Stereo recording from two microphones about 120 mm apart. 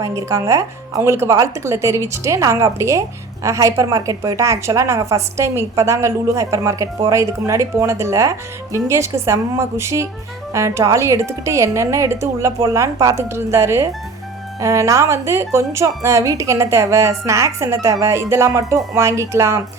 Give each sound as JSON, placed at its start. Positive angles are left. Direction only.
{"t": 0.0, "sound": "a woman's voice", "side_deg": -25}